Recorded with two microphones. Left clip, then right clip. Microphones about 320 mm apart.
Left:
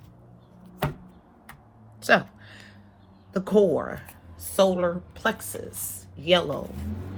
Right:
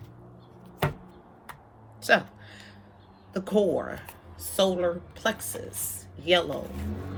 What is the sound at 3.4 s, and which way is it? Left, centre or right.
Speech, centre.